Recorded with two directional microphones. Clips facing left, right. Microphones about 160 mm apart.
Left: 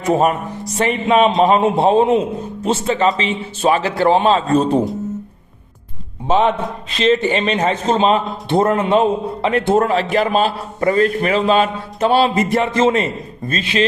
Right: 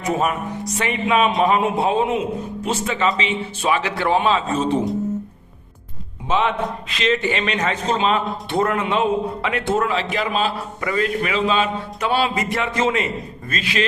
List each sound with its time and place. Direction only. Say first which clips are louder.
0.0 s a man's voice: left 6 dB; 35° left (ahead or behind)
6.2 s a man's voice: left 5 dB; 35° left (ahead or behind)